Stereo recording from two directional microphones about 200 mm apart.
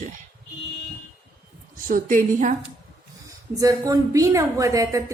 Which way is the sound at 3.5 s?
15° right (ahead or behind).